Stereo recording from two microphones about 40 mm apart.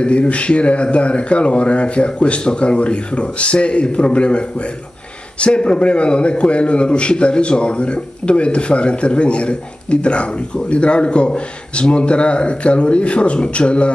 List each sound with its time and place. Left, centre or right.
0.0 s a man's voice: left